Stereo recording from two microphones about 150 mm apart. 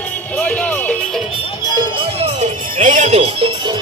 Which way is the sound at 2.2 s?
50° right (ahead or behind).